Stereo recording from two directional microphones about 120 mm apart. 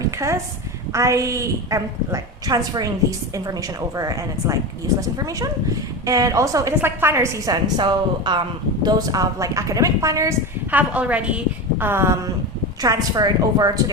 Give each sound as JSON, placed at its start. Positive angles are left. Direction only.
{"t": 0.2, "sound": "a woman's voice", "side_deg": -25}
{"t": 10.7, "sound": "a woman's voice", "side_deg": -15}